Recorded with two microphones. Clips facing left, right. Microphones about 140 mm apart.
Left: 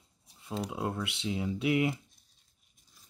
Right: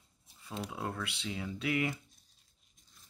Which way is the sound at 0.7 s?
20° left (ahead or behind).